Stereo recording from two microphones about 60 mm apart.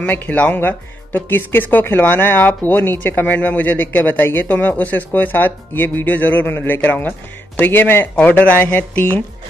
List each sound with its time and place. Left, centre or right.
0.0 s speech: left